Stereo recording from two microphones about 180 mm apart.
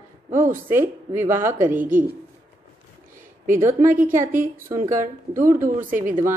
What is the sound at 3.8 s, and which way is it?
A woman's voice, 45° right (ahead or behind).